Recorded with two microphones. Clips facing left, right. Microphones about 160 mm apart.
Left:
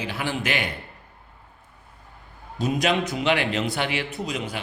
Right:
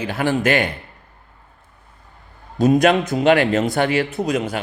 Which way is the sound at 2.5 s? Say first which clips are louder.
Right 9 dB; 45° right (ahead or behind).